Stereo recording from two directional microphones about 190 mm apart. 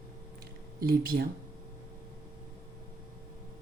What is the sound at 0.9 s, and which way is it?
Speech, 50° right (ahead or behind).